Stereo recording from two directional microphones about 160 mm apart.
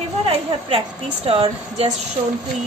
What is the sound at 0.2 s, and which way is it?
A woman's voice, 35° right (ahead or behind).